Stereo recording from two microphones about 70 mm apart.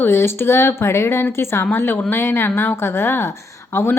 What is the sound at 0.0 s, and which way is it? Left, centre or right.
A woman's voice, left.